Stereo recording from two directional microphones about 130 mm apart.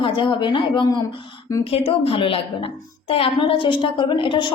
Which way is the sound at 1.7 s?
45° left (ahead or behind).